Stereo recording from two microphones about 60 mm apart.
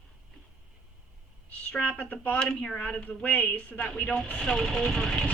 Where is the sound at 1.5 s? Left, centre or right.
Left.